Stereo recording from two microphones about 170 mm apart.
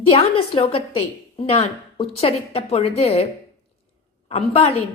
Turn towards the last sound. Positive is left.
turn(degrees=35)  # may be behind; listen again after turning